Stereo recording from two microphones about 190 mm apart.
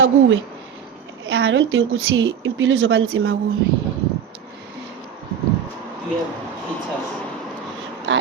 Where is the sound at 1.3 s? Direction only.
80° right.